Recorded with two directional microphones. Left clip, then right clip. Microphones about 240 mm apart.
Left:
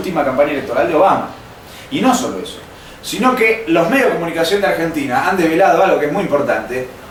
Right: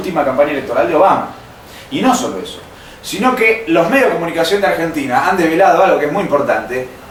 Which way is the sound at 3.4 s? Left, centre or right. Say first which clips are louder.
Right 4 dB; centre.